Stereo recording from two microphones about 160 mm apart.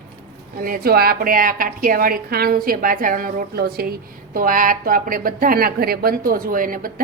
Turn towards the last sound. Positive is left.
turn(degrees=-60)  # may be behind; listen again after turning